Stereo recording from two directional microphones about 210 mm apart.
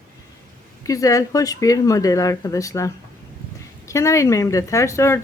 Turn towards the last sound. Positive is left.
turn(degrees=15)  # may be behind; listen again after turning